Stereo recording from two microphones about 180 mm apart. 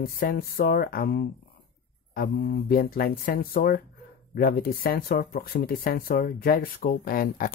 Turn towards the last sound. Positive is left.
turn(degrees=50)  # may be behind; listen again after turning